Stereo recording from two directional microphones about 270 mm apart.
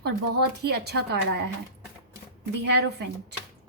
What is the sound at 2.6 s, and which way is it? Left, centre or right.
Speech, right.